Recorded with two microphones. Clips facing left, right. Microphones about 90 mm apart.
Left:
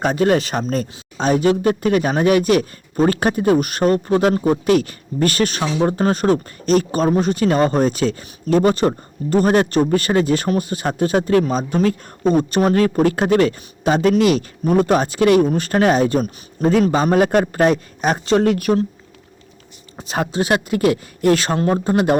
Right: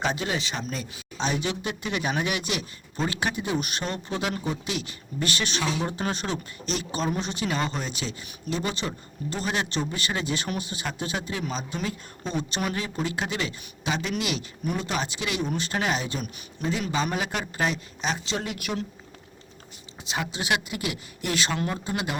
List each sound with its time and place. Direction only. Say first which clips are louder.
0.0 s speech: left 12 dB; 50° left (ahead or behind)
20.0 s speech: left 10 dB; 45° left (ahead or behind)